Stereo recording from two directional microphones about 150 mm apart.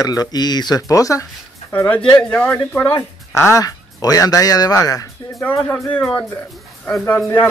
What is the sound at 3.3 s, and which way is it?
Speech, 20° left (ahead or behind).